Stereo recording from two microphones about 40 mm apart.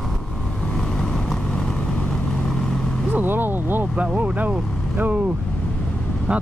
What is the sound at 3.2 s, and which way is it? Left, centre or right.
Vehicle, right.